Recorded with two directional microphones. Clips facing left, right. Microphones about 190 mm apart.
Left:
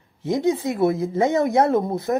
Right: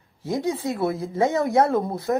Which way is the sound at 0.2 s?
20° left (ahead or behind).